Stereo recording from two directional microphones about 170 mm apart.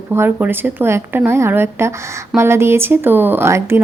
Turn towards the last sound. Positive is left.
turn(degrees=-15)  # may be behind; listen again after turning